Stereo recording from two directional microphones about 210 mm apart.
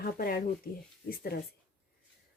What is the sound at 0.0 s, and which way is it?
Speech, 45° left (ahead or behind).